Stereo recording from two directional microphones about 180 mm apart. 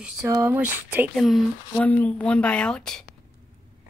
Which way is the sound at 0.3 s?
10° right (ahead or behind).